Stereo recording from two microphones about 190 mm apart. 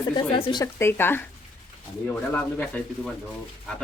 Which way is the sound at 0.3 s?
30° left (ahead or behind).